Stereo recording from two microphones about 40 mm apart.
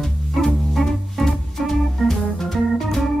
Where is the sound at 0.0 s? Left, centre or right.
Centre.